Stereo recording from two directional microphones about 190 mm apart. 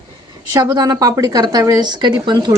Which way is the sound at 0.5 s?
20° right (ahead or behind).